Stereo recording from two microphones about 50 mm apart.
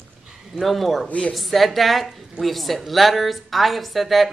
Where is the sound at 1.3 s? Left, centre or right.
Centre.